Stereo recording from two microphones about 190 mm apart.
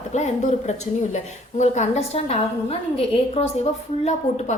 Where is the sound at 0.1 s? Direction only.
35° left (ahead or behind).